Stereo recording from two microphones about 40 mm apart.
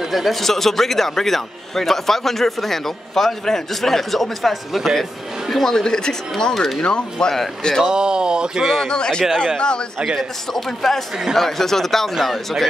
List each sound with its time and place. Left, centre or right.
0.0 s a man's voice: centre; by 7.3 s left
7.8 s speech: right
8.7 s a man's voice: centre
10.5 s a man's voice: centre